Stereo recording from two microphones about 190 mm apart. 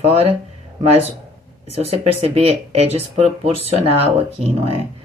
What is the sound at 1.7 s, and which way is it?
Speech, 30° right (ahead or behind).